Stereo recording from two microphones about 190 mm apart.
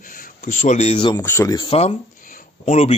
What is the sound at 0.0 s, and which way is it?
Speech, 45° left (ahead or behind).